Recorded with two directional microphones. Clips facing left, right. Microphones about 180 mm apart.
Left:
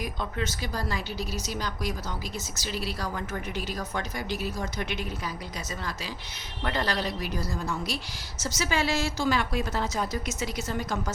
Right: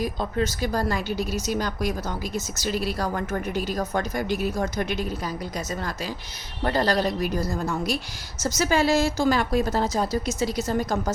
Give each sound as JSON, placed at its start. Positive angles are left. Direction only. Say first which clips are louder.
{"t": 0.0, "sound": "a woman's voice", "louder": "right 6 dB", "side_deg": -35}